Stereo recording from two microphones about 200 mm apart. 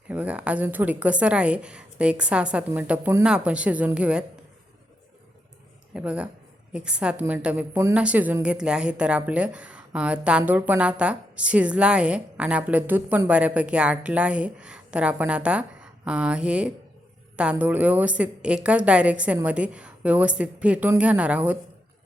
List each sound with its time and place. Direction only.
0.1 s a woman's voice: 5° right (ahead or behind)
5.9 s a woman's voice: 5° right (ahead or behind)